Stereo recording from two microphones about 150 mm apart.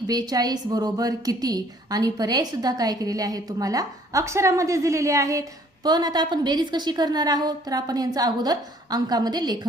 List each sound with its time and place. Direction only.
0.1 s a woman's voice: 25° right (ahead or behind)